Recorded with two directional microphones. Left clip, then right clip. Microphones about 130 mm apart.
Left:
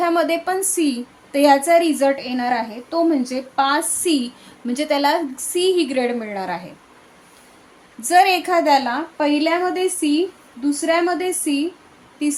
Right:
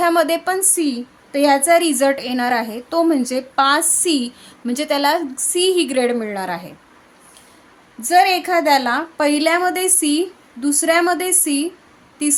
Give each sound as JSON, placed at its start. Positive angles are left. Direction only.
{"t": 0.0, "sound": "a woman's voice", "side_deg": -35}
{"t": 0.8, "sound": "a woman's voice", "side_deg": -20}
{"t": 8.0, "sound": "a woman's voice", "side_deg": -20}